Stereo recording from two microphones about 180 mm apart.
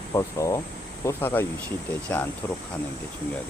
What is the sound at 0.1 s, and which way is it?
Speech, 15° left (ahead or behind).